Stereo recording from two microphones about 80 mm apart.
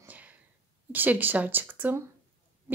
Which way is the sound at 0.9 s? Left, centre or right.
Right.